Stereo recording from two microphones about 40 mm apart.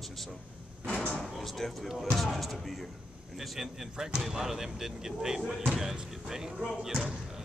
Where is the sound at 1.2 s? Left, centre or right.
Centre.